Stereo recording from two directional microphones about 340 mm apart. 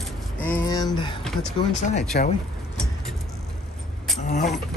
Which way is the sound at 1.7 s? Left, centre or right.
Centre.